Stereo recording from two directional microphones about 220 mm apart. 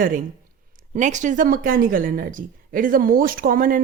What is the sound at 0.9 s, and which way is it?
Speech, 35° right (ahead or behind).